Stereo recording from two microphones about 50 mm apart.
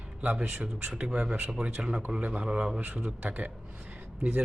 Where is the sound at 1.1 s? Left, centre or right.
Centre.